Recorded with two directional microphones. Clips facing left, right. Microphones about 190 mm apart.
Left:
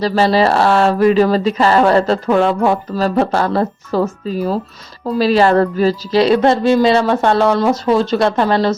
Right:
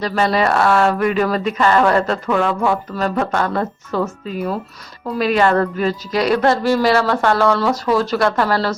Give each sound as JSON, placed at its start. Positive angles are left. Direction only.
{"t": 0.0, "sound": "a woman's voice", "side_deg": 30}